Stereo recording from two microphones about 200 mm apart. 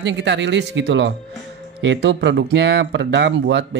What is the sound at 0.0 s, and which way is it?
Speech, 60° right (ahead or behind).